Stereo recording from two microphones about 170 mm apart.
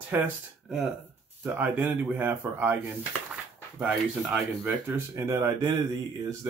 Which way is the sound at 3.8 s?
5° right (ahead or behind).